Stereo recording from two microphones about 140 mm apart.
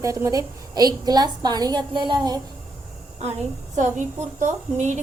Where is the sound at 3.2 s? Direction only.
55° right (ahead or behind).